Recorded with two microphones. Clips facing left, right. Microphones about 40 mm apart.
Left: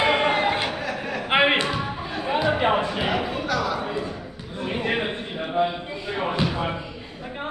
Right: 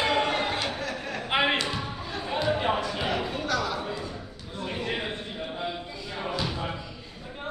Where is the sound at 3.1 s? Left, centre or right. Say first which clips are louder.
Left 3 dB; centre.